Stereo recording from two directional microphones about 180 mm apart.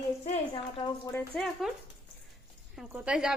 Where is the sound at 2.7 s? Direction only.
5° right (ahead or behind).